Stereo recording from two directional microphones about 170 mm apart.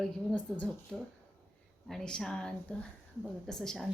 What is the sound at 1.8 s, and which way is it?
Speech, 5° left (ahead or behind).